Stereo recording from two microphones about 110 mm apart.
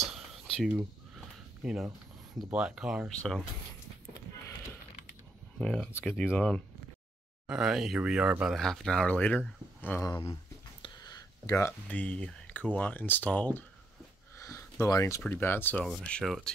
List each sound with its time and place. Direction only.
0.3 s a sound: 5° right (ahead or behind)
2.5 s speech: 10° right (ahead or behind)
3.2 s speech: centre (ahead or behind)
5.6 s speech: 10° left (ahead or behind)
7.4 s speech: 5° right (ahead or behind)
8.5 s speech: 5° left (ahead or behind)
10.0 s speech: 30° left (ahead or behind)
11.0 s a sound: 35° left (ahead or behind)
11.9 s speech: 15° left (ahead or behind)
14.4 s a sound: 30° left (ahead or behind)
15.2 s speech: 20° left (ahead or behind)
15.7 s speech: 5° left (ahead or behind)